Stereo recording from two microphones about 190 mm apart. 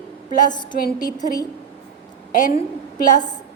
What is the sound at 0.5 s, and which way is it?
Speech, 25° left (ahead or behind).